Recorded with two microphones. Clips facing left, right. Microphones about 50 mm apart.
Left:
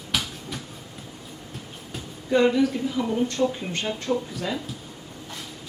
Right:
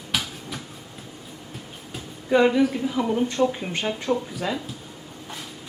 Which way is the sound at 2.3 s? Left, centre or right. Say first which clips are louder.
Right 1 dB; centre.